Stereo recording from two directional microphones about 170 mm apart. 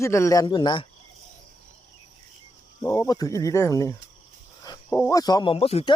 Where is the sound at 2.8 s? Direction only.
20° left (ahead or behind).